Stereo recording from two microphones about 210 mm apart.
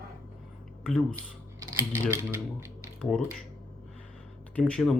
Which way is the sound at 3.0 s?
Centre (ahead or behind).